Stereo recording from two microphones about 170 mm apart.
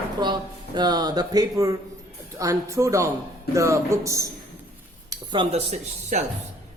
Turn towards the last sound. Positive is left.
turn(degrees=-40)  # may be behind; listen again after turning